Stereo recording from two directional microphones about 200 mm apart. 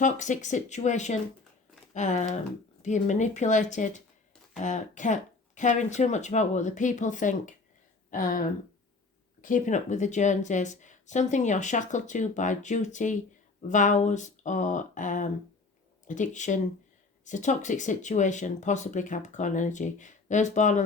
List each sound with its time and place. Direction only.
0.0 s speech: 40° left (ahead or behind)